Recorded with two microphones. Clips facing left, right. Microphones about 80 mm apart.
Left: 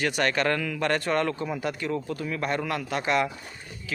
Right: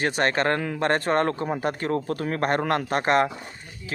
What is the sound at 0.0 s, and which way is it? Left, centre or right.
A man's voice, right.